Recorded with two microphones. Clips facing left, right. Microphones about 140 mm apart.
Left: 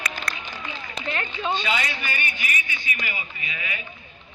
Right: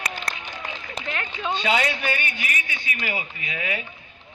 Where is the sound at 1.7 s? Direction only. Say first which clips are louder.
Right 4 dB; 60° right (ahead or behind).